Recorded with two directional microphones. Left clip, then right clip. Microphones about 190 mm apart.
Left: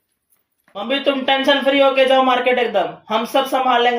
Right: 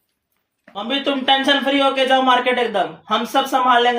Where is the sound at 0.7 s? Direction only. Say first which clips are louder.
Left 2 dB; 20° right (ahead or behind).